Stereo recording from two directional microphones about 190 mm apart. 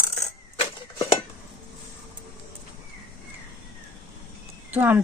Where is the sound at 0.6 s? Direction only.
30° left (ahead or behind).